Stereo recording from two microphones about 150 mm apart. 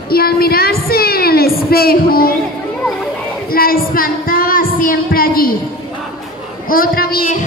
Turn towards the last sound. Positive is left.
turn(degrees=70)  # may be behind; listen again after turning